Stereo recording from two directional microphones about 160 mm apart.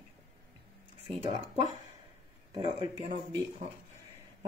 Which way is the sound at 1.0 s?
35° right (ahead or behind).